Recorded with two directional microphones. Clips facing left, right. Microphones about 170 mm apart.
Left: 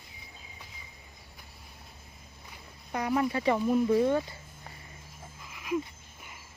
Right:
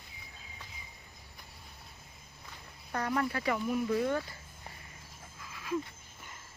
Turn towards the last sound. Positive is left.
turn(degrees=15)  # may be behind; listen again after turning